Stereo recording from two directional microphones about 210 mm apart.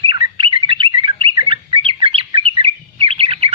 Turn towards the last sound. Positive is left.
turn(degrees=-25)  # may be behind; listen again after turning